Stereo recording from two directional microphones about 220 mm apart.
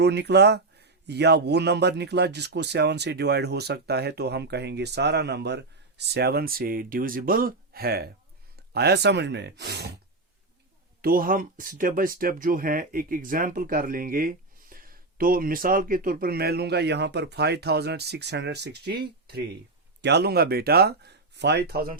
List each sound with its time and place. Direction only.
0.0 s a man's voice: 50° right (ahead or behind)
11.0 s a man's voice: 40° right (ahead or behind)